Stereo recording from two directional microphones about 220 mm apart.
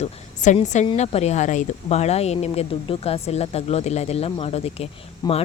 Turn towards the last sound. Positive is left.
turn(degrees=20)  # may be behind; listen again after turning